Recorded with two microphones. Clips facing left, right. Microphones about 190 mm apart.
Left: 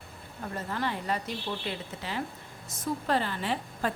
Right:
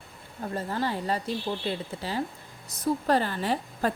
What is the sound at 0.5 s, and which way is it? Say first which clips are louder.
A woman's voice: right 3 dB; 30° right (ahead or behind).